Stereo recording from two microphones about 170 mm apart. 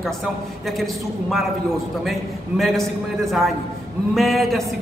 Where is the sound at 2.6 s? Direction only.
Centre (ahead or behind).